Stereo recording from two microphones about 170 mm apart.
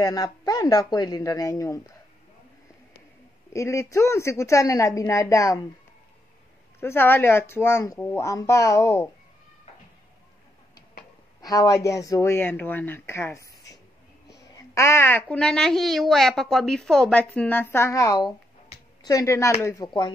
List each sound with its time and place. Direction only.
0.0 s speech: 20° left (ahead or behind)
3.5 s speech: 15° left (ahead or behind)
6.8 s speech: 15° left (ahead or behind)
11.4 s speech: 20° left (ahead or behind)